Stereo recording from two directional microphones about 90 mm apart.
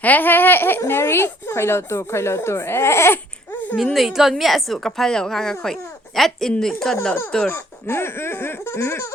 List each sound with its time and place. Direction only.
0.0 s speech: 20° left (ahead or behind)
3.9 s a woman's voice: centre (ahead or behind); by 7.5 s 15° left (ahead or behind)
7.5 s speech: 25° left (ahead or behind)